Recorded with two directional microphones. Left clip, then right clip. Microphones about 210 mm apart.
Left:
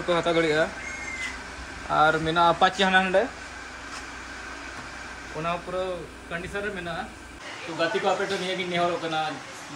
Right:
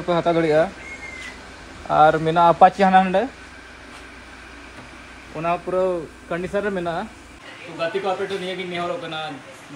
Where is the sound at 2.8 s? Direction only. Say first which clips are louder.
Right 5 dB; 30° right (ahead or behind).